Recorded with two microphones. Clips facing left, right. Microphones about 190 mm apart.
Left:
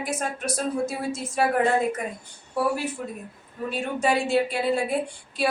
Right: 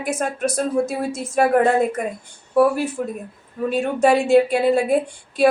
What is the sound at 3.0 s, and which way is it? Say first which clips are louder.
A woman's voice: right 7 dB; 55° right (ahead or behind).